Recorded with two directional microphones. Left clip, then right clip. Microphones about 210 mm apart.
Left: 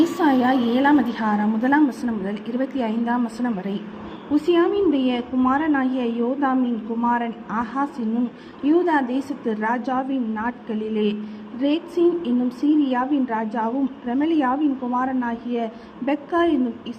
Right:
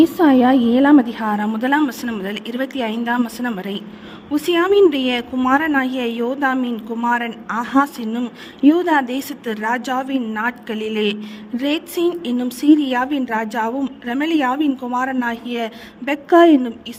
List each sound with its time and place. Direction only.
0.0 s a woman's voice: 35° right (ahead or behind); by 16.6 s 50° right (ahead or behind)